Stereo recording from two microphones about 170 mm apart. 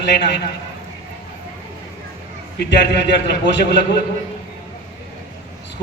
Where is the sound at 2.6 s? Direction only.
90° left.